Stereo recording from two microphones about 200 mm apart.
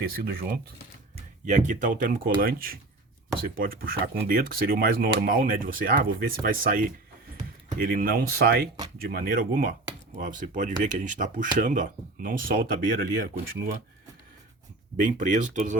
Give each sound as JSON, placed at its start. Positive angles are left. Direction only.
{"t": 0.0, "sound": "speech", "side_deg": -50}
{"t": 1.1, "sound": "speech", "side_deg": -40}
{"t": 14.9, "sound": "speech", "side_deg": -40}